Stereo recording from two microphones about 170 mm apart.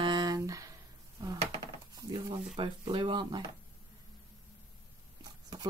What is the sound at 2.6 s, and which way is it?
Speech, 30° right (ahead or behind).